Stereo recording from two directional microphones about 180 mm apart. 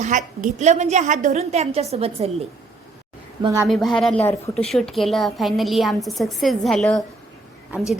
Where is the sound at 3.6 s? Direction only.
Centre (ahead or behind).